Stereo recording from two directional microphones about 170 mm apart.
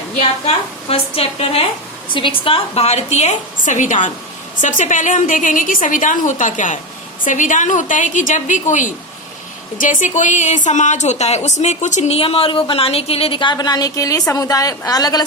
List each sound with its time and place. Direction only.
0.4 s a woman's voice: 35° left (ahead or behind)